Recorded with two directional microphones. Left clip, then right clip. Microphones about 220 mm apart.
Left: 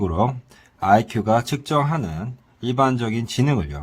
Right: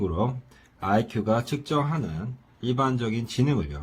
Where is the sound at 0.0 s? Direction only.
35° left (ahead or behind).